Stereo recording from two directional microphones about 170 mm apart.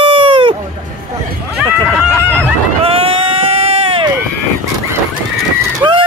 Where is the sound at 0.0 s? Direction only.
30° right (ahead or behind).